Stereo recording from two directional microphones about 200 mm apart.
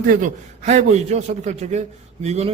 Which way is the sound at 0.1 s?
40° right (ahead or behind).